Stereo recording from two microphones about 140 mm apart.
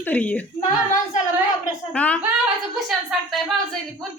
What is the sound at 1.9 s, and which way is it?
A woman's voice, 10° left (ahead or behind).